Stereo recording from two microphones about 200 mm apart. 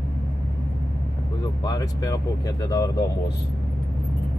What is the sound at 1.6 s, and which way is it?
Speech, 20° left (ahead or behind).